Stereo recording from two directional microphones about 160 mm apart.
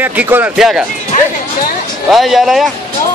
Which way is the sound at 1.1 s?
50° left (ahead or behind).